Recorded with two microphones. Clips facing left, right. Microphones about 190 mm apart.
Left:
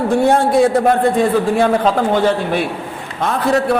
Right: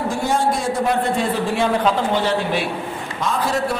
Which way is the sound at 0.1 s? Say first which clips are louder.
Left 8 dB; 60° left (ahead or behind).